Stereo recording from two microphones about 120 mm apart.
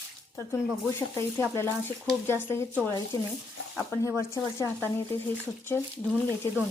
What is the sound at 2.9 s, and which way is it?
A woman's voice, 30° left (ahead or behind).